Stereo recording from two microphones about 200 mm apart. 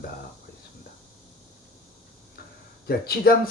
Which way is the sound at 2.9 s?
50° left (ahead or behind).